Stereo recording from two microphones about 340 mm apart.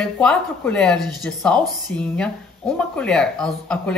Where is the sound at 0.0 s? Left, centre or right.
Centre.